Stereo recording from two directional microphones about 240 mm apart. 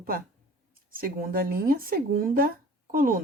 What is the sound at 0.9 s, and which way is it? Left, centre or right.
Speech, right.